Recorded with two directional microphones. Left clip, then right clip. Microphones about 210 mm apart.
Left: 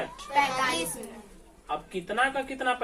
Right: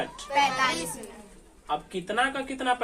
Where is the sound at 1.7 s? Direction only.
45° right (ahead or behind).